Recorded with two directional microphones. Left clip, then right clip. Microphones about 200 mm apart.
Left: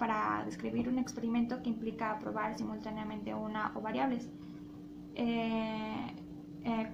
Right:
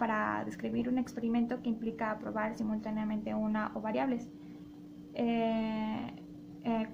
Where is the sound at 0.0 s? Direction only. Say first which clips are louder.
Right 1 dB; 45° right (ahead or behind).